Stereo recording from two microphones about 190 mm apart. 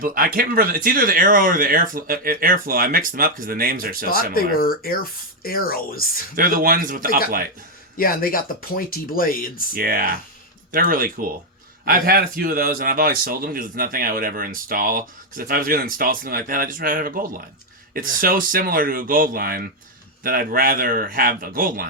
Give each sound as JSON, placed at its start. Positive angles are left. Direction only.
{"t": 0.0, "sound": "speech", "side_deg": -50}
{"t": 4.1, "sound": "speech", "side_deg": 50}
{"t": 6.3, "sound": "speech", "side_deg": -50}
{"t": 7.9, "sound": "speech", "side_deg": 50}
{"t": 9.7, "sound": "speech", "side_deg": -50}